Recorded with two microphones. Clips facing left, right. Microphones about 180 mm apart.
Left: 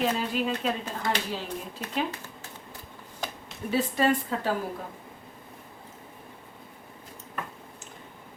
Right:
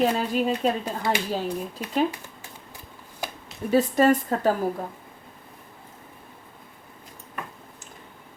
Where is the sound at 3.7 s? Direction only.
45° right (ahead or behind).